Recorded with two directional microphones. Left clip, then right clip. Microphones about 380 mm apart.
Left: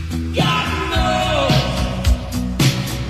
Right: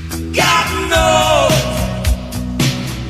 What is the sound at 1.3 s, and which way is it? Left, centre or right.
Music, right.